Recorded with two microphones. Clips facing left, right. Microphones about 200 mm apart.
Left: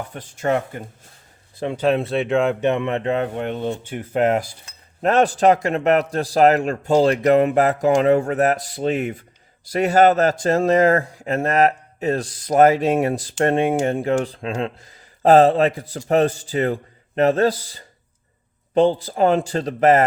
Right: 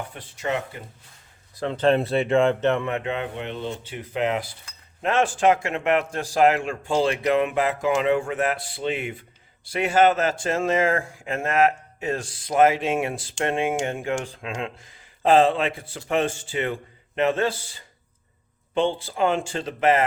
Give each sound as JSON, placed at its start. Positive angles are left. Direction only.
{"t": 0.1, "sound": "speech", "side_deg": 45}
{"t": 1.5, "sound": "speech", "side_deg": 15}
{"t": 2.9, "sound": "a man's voice", "side_deg": 40}